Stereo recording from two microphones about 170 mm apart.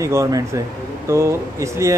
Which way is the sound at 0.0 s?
20° right (ahead or behind).